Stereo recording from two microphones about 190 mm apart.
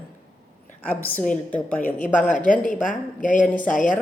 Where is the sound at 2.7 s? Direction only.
45° left (ahead or behind).